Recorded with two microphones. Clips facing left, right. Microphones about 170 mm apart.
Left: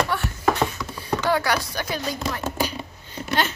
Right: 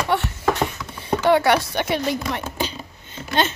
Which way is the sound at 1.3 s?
25° right (ahead or behind).